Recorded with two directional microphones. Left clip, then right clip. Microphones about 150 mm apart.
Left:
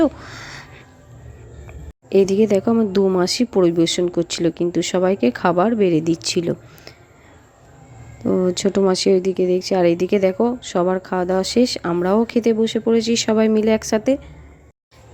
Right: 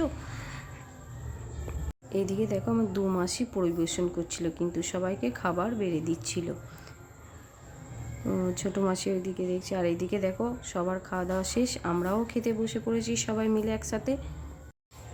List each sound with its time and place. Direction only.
0.0 s a sound: 50° left (ahead or behind)
2.0 s speech: 45° left (ahead or behind)
2.7 s speech: 30° left (ahead or behind)
3.2 s speech: 45° left (ahead or behind)
8.2 s speech: 40° left (ahead or behind)